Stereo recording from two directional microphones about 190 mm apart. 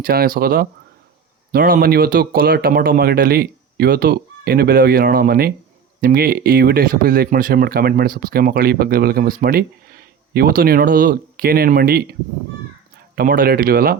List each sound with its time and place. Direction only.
0.0 s speech: 50° right (ahead or behind)
13.1 s speech: 50° right (ahead or behind)